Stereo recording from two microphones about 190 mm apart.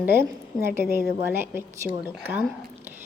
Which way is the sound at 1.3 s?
10° right (ahead or behind).